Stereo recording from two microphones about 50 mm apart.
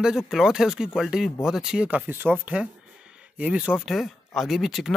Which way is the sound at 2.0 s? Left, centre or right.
Right.